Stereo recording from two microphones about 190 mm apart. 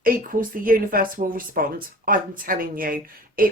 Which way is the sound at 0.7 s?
50° right (ahead or behind).